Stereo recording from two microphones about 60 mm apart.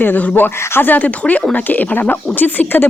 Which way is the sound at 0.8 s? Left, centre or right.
Left.